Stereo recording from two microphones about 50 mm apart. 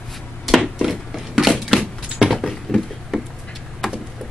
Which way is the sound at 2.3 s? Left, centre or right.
Centre.